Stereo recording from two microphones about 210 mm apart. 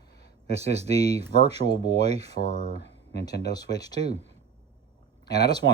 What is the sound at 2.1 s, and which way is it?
Speech, 30° right (ahead or behind).